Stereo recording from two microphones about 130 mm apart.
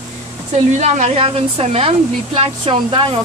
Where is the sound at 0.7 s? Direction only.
65° right (ahead or behind).